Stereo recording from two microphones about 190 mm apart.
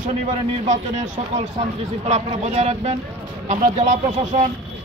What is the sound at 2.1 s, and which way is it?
Speech, 35° right (ahead or behind).